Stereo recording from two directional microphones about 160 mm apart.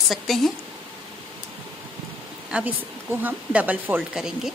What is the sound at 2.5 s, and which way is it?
A woman's voice, 10° right (ahead or behind).